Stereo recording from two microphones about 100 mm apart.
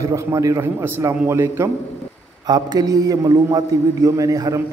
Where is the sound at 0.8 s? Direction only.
20° right (ahead or behind).